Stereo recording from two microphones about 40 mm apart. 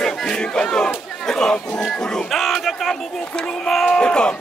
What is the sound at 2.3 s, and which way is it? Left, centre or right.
A man's voice, centre.